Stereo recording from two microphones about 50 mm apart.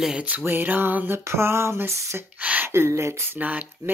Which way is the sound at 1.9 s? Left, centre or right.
Right.